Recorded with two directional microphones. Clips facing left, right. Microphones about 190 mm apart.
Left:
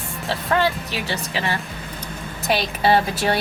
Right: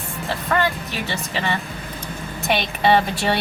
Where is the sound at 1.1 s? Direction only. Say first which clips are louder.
Right 1 dB; centre (ahead or behind).